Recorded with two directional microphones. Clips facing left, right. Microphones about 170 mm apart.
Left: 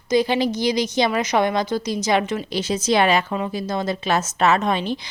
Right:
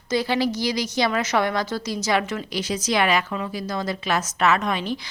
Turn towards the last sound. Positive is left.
turn(degrees=25)  # may be behind; listen again after turning